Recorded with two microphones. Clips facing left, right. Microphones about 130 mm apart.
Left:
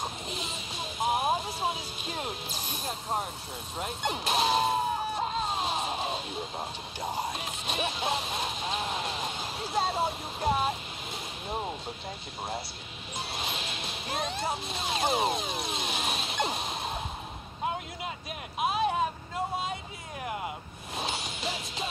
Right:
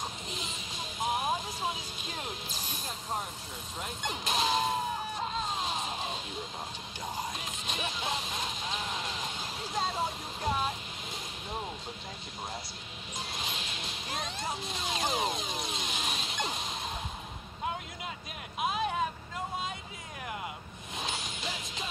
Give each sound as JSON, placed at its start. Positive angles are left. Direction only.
{"t": 0.4, "sound": "vehicle", "side_deg": 10}
{"t": 1.1, "sound": "music", "side_deg": 35}
{"t": 2.8, "sound": "vehicle", "side_deg": 35}
{"t": 3.8, "sound": "speech", "side_deg": 35}
{"t": 4.3, "sound": "a sound", "side_deg": 35}
{"t": 7.0, "sound": "music", "side_deg": 35}
{"t": 8.6, "sound": "vehicle", "side_deg": 35}
{"t": 14.4, "sound": "speech", "side_deg": 35}
{"t": 15.4, "sound": "vehicle", "side_deg": 5}
{"t": 15.7, "sound": "vehicle", "side_deg": 30}
{"t": 16.3, "sound": "a sound", "side_deg": 35}
{"t": 18.7, "sound": "vehicle", "side_deg": 30}
{"t": 20.9, "sound": "music", "side_deg": 35}